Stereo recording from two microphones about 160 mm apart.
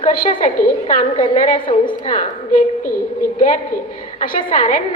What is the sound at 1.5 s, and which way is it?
Speech, 30° left (ahead or behind).